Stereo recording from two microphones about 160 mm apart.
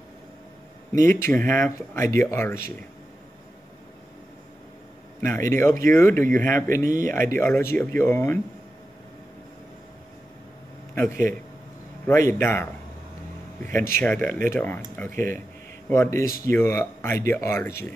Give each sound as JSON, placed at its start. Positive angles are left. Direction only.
{"t": 0.9, "sound": "speech", "side_deg": 15}
{"t": 5.2, "sound": "speech", "side_deg": 15}
{"t": 12.3, "sound": "speech", "side_deg": 15}
{"t": 13.7, "sound": "speech", "side_deg": 15}